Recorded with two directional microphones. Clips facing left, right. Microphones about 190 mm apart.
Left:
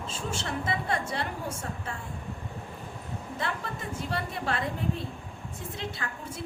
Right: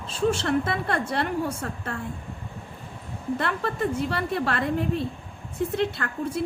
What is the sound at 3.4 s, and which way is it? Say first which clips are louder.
A woman's voice: right 7 dB; 65° right (ahead or behind).